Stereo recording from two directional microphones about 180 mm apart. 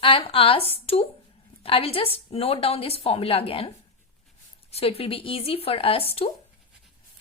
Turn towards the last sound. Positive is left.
turn(degrees=30)  # may be behind; listen again after turning